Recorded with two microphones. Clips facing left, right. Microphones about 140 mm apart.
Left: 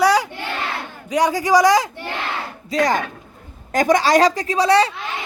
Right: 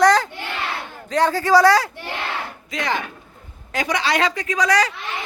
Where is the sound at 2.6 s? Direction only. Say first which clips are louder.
Left 7 dB; 40° left (ahead or behind).